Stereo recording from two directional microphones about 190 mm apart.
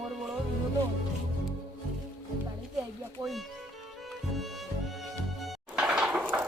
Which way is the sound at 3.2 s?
Centre (ahead or behind).